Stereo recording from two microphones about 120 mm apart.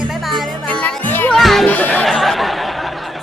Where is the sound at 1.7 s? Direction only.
15° left (ahead or behind).